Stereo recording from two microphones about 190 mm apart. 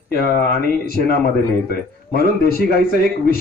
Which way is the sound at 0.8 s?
55° left (ahead or behind).